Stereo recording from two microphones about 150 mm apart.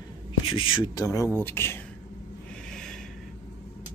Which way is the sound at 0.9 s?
25° left (ahead or behind).